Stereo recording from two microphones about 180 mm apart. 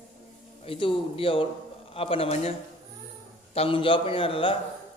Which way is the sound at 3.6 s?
30° left (ahead or behind).